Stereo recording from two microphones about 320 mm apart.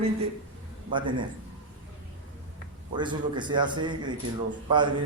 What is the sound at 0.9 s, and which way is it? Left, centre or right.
Speech, centre.